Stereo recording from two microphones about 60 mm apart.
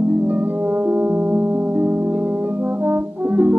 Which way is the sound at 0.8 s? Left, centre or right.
Right.